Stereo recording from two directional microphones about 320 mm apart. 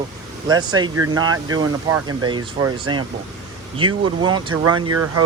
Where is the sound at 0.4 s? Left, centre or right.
Centre.